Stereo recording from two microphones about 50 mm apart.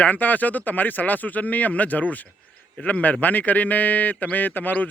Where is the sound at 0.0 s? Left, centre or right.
Left.